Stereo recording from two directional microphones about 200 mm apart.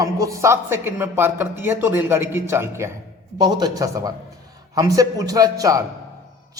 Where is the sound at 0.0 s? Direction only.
15° right (ahead or behind).